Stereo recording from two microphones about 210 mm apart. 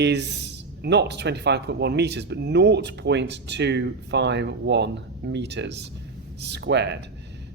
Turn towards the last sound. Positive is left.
turn(degrees=-55)  # may be behind; listen again after turning